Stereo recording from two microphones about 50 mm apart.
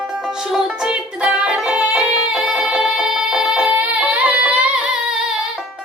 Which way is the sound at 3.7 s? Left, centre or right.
Right.